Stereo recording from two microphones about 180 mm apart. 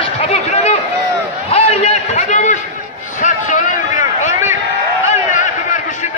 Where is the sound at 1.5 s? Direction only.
35° left (ahead or behind).